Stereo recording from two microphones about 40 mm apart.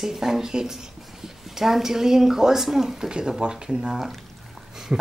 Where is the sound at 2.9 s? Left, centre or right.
Centre.